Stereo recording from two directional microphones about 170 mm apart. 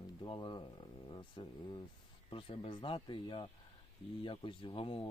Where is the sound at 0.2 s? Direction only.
30° left (ahead or behind).